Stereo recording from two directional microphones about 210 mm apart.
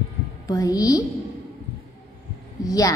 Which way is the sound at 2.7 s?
15° left (ahead or behind).